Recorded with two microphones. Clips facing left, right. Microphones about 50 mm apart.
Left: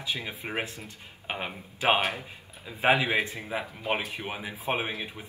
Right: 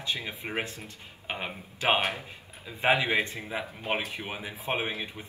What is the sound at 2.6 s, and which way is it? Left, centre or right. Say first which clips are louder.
Speech: left 1 dB; centre.